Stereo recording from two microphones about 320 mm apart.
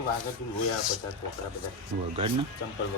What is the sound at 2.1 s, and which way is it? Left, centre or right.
Speech, centre.